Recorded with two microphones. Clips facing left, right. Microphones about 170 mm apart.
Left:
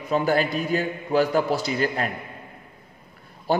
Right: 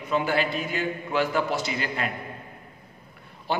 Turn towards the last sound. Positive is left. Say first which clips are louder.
# left 5 dB
turn(degrees=40)  # may be behind; listen again after turning